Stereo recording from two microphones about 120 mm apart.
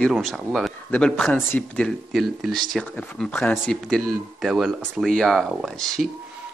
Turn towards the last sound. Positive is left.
turn(degrees=0)  # may be behind; listen again after turning